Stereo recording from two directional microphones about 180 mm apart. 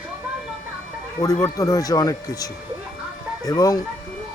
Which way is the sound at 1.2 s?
20° left (ahead or behind).